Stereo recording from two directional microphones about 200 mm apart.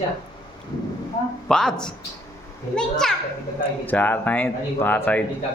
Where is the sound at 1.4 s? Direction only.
5° left (ahead or behind).